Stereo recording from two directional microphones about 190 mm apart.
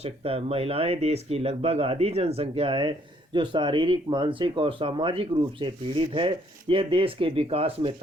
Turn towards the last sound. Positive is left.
turn(degrees=-30)  # may be behind; listen again after turning